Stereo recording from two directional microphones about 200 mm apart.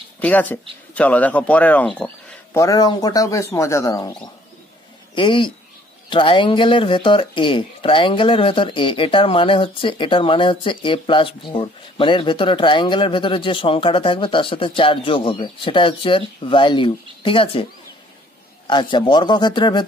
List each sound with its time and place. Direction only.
0.2 s speech: 10° left (ahead or behind); by 17.6 s 25° left (ahead or behind)
18.7 s speech: 25° left (ahead or behind)